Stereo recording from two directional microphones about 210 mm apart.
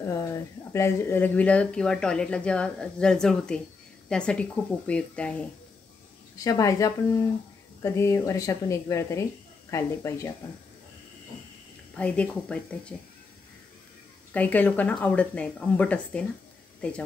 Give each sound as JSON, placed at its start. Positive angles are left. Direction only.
{"t": 0.0, "sound": "speech", "side_deg": 15}
{"t": 6.3, "sound": "speech", "side_deg": 15}
{"t": 12.0, "sound": "speech", "side_deg": 5}
{"t": 14.3, "sound": "speech", "side_deg": 5}